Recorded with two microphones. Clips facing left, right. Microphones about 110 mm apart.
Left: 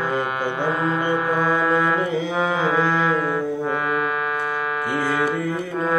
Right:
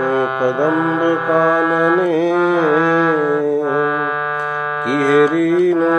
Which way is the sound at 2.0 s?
60° right (ahead or behind).